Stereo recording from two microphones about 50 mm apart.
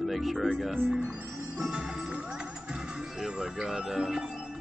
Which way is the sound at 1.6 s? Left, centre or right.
Centre.